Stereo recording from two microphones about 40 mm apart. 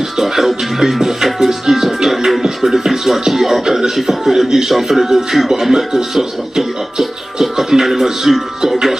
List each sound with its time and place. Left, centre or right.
0.2 s music: centre